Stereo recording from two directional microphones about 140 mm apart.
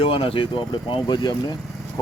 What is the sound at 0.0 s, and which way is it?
Speech, 40° left (ahead or behind).